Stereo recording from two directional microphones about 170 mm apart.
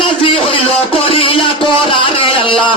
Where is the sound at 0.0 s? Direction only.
30° left (ahead or behind).